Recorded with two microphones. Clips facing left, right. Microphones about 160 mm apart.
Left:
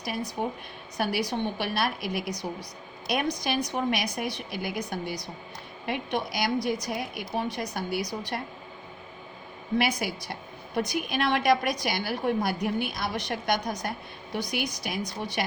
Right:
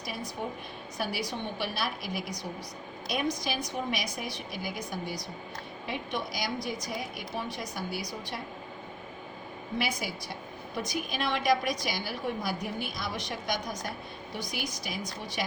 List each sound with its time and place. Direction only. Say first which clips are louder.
0.4 s a woman's voice: left 4 dB; 60° left (ahead or behind)
9.7 s a woman's voice: left 6 dB; 70° left (ahead or behind)